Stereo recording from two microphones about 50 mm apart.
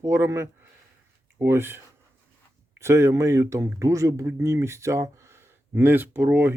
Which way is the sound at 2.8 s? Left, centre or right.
Right.